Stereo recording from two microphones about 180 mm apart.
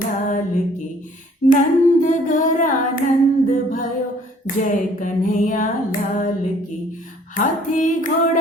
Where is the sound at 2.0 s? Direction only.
45° left (ahead or behind).